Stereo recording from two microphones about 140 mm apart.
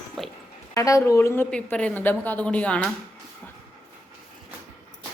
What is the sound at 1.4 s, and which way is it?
Speech, 5° left (ahead or behind).